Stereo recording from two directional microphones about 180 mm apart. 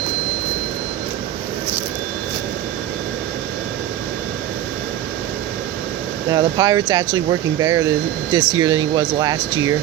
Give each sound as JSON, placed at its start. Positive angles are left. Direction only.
{"t": 6.3, "sound": "speech", "side_deg": -25}